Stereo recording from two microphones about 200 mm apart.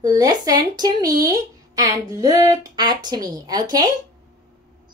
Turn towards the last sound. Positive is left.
turn(degrees=-20)  # may be behind; listen again after turning